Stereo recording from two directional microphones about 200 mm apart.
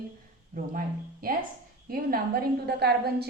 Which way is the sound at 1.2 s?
45° right (ahead or behind).